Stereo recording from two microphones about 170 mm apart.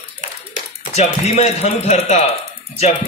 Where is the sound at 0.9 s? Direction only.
40° left (ahead or behind).